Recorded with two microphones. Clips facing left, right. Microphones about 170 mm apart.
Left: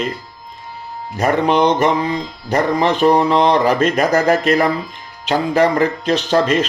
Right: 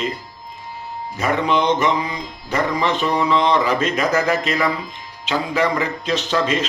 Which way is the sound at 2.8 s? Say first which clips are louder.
Left 6 dB; 40° left (ahead or behind).